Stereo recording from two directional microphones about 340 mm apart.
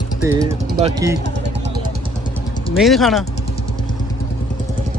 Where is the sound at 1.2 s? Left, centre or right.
Right.